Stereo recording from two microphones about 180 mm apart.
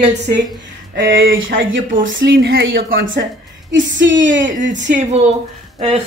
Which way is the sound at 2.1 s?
80° right.